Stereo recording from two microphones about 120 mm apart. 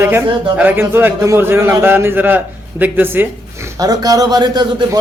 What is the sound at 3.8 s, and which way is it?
Speech, 30° right (ahead or behind).